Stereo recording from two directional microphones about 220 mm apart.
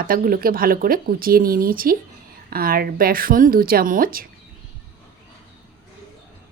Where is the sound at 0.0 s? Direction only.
40° right (ahead or behind).